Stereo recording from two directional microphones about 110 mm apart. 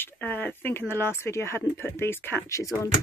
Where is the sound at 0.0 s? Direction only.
15° left (ahead or behind).